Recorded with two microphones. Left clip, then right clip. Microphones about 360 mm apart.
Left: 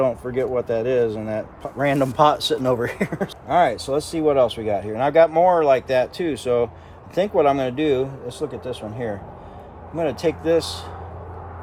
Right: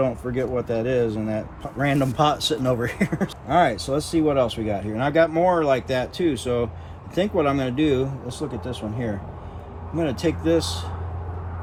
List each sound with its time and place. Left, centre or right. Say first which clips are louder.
0.0 s speech: left 3 dB; centre